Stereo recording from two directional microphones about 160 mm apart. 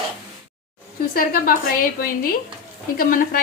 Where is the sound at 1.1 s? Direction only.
60° left (ahead or behind).